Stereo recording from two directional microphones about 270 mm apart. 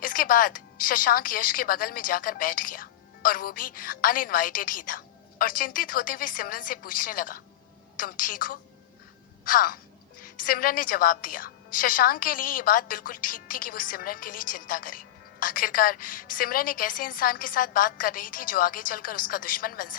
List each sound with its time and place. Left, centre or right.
0.0 s a woman's voice: left